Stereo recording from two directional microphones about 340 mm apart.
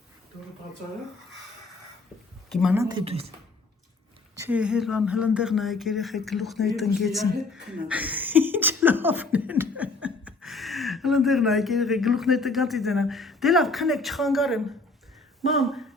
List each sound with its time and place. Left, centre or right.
2.5 s speech: centre
4.4 s speech: centre